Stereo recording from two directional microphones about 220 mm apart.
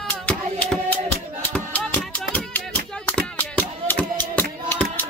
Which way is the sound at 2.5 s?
10° left (ahead or behind).